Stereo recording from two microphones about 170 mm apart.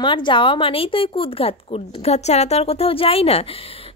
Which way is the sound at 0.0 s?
30° left (ahead or behind).